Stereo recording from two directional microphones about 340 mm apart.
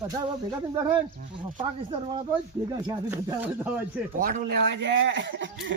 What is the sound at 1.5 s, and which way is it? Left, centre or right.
Speech, centre.